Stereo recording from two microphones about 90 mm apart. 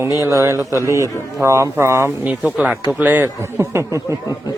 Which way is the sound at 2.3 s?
15° right (ahead or behind).